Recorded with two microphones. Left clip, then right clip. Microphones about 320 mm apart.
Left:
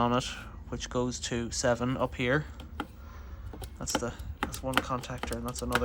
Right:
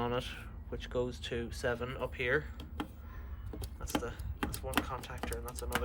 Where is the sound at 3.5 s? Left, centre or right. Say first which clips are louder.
Left 5 dB; centre.